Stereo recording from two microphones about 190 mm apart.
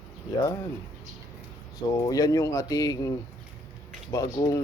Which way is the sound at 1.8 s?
20° left (ahead or behind).